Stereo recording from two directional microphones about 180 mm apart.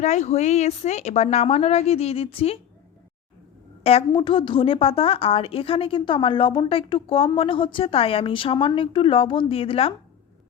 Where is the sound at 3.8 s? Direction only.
35° left (ahead or behind).